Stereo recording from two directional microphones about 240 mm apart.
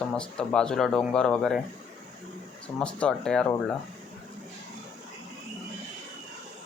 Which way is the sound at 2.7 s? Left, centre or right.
Centre.